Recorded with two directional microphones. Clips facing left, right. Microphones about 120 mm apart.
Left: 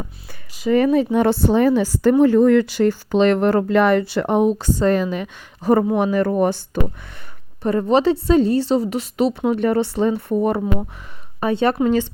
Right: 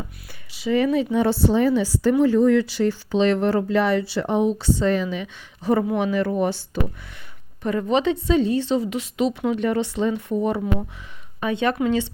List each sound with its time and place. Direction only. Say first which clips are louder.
0.5 s a woman's voice: left 4 dB; 45° left (ahead or behind)
7.6 s a woman's voice: left 4 dB; 35° left (ahead or behind)